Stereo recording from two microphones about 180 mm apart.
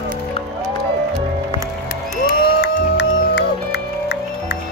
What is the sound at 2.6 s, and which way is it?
Music, 70° left (ahead or behind).